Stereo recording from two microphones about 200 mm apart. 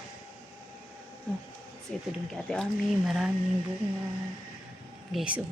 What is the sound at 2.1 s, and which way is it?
Speech, centre (ahead or behind).